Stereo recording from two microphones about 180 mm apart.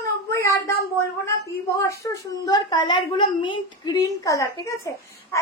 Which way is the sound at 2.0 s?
20° left (ahead or behind).